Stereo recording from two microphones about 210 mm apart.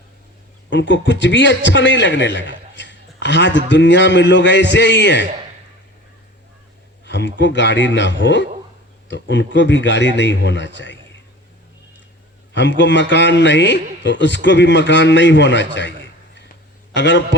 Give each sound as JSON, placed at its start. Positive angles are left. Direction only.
{"t": 0.7, "sound": "a man's voice", "side_deg": 60}
{"t": 7.0, "sound": "a man's voice", "side_deg": 55}
{"t": 12.5, "sound": "a man's voice", "side_deg": 60}